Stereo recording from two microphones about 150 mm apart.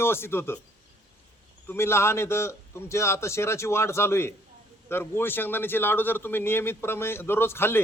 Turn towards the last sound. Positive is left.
turn(degrees=15)  # may be behind; listen again after turning